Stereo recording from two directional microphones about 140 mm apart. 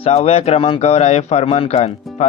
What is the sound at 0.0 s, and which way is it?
A man's voice, 45° left (ahead or behind).